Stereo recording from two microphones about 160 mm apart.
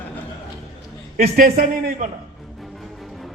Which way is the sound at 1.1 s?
65° right (ahead or behind).